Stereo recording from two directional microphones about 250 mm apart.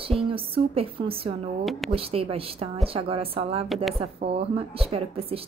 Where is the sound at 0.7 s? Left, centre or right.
Right.